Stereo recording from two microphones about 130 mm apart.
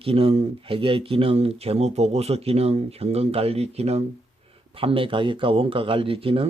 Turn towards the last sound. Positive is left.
turn(degrees=-45)  # may be behind; listen again after turning